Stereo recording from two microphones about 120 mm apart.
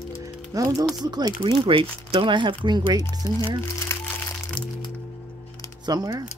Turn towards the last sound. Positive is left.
turn(degrees=-30)  # may be behind; listen again after turning